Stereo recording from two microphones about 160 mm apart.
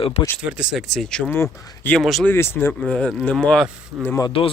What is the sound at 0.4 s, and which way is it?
Speech, 5° right (ahead or behind).